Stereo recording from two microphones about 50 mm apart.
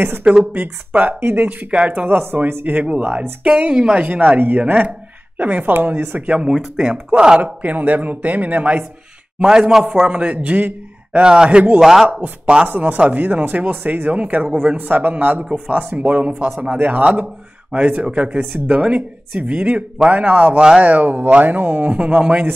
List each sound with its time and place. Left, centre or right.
0.2 s speech: right
4.0 s speech: right
6.5 s speech: centre
7.4 s speech: right
11.1 s speech: centre
11.8 s speech: centre
12.1 s speech: right
12.6 s speech: right
15.4 s speech: centre
15.9 s speech: right
16.4 s speech: centre
17.6 s speech: right